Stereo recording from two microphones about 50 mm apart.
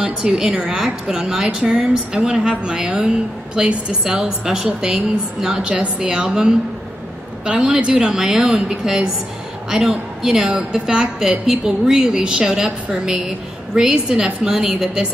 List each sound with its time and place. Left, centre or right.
0.0 s a woman's voice: centre